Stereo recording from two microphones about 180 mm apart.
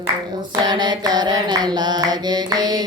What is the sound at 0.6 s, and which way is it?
Mantra, 25° right (ahead or behind).